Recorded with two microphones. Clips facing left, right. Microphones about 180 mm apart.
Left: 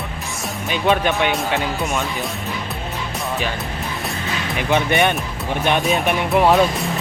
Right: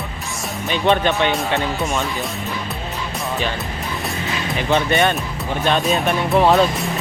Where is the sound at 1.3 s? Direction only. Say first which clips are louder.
Right 1 dB; centre (ahead or behind).